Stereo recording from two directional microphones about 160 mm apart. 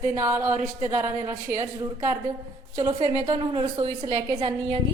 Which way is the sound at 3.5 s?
30° right (ahead or behind).